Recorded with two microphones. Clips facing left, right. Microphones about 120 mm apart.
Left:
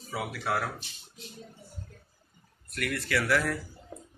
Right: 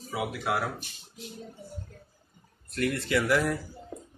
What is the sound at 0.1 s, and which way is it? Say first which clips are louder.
Speech: right 2 dB; 15° right (ahead or behind).